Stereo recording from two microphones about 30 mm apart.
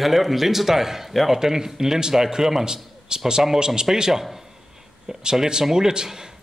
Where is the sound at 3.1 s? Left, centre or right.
Right.